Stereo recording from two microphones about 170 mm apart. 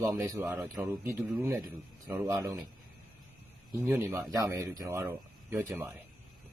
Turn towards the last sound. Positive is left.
turn(degrees=-10)  # may be behind; listen again after turning